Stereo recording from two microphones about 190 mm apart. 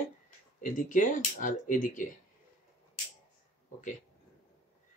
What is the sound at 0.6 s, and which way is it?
Speech, 45° left (ahead or behind).